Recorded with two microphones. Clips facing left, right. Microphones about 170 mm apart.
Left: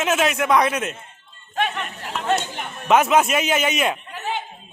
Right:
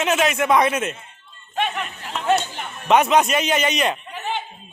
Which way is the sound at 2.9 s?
Centre (ahead or behind).